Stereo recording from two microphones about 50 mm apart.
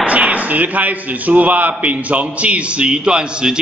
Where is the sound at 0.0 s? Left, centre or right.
Right.